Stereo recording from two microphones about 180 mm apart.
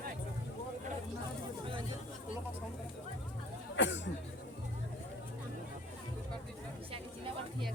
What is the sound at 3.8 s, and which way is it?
Speech, 90° left.